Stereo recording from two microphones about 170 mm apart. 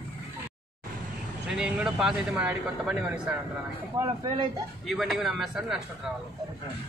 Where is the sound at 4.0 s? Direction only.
25° right (ahead or behind).